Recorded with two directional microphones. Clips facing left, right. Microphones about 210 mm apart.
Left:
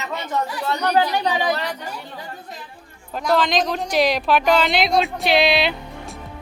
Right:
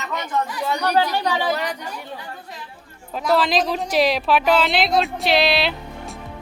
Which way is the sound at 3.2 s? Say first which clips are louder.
Even; 5° right (ahead or behind).